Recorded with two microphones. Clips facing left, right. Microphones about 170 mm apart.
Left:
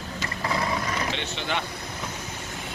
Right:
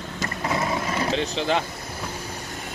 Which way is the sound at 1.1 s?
35° right (ahead or behind).